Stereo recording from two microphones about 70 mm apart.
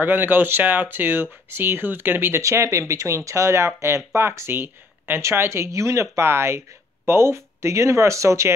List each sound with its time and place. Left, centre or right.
0.0 s speech: right
2.4 s speech: right